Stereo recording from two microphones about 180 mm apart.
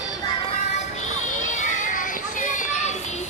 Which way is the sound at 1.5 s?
45° left (ahead or behind).